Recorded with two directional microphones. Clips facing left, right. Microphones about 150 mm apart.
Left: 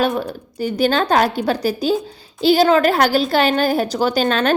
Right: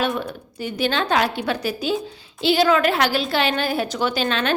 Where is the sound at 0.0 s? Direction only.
40° left (ahead or behind).